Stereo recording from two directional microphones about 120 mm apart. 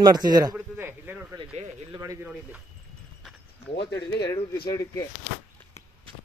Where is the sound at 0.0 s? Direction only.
35° right (ahead or behind).